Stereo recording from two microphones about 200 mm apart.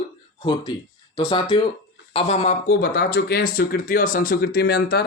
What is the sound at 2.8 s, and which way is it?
Speech, 50° left (ahead or behind).